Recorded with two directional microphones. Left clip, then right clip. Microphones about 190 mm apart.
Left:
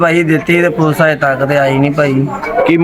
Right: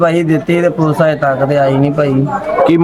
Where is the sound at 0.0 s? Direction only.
15° right (ahead or behind).